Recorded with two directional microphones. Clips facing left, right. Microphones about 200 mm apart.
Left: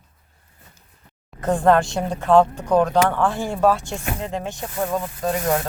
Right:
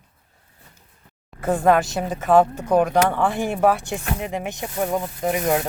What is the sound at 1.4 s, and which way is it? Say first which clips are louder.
A woman's voice: left 1 dB; 10° right (ahead or behind).